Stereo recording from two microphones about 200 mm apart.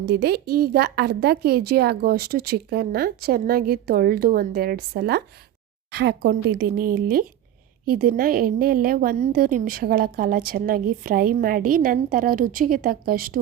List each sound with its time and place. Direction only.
0.0 s a woman's voice: 55° right (ahead or behind)